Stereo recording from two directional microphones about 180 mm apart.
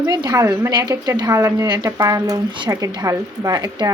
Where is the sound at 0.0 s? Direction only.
25° right (ahead or behind).